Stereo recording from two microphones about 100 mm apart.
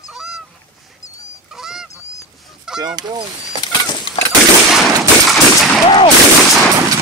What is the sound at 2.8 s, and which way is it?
Speech, 45° right (ahead or behind).